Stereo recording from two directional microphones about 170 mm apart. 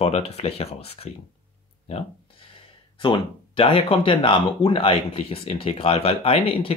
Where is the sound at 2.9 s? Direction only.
30° left (ahead or behind).